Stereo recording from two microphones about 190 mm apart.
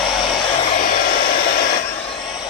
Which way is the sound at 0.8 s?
45° left (ahead or behind).